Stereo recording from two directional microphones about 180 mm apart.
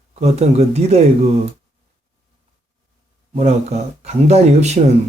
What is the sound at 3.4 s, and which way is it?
Speech, 35° right (ahead or behind).